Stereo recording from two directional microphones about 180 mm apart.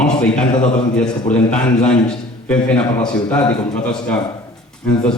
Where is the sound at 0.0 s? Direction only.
5° left (ahead or behind).